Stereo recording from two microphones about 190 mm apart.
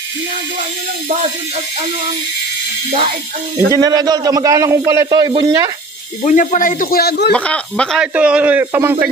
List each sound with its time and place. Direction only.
1.0 s speech: 35° right (ahead or behind)
3.7 s a man's voice: 20° right (ahead or behind)
6.2 s speech: 40° left (ahead or behind); by 7.3 s 60° left (ahead or behind)
7.3 s speech: 5° left (ahead or behind)
8.1 s a man's voice: 5° right (ahead or behind)